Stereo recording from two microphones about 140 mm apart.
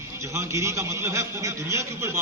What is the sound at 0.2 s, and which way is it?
A man's voice, 20° right (ahead or behind).